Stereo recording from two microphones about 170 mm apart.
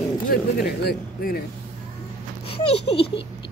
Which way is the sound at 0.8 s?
65° left (ahead or behind).